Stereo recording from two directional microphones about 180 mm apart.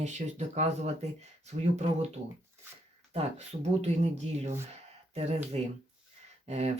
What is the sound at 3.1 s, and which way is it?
Speech, 35° right (ahead or behind).